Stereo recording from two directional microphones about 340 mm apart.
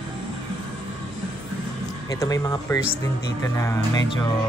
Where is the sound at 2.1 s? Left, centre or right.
Centre.